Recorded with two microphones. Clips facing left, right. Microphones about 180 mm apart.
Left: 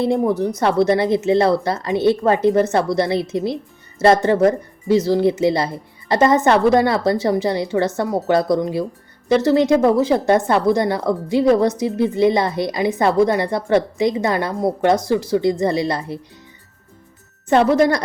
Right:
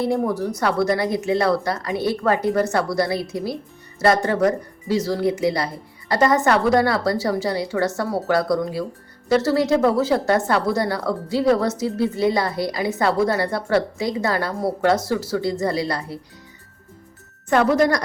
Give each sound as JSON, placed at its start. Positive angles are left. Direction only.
{"t": 0.0, "sound": "speech", "side_deg": 25}
{"t": 17.5, "sound": "speech", "side_deg": 25}